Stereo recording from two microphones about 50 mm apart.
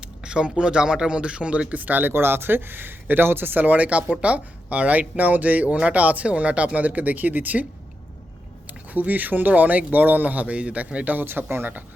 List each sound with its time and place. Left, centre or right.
0.0 s speech: centre; by 2.1 s right
2.1 s speech: right